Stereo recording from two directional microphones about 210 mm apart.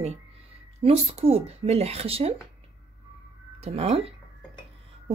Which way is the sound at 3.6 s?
30° right (ahead or behind).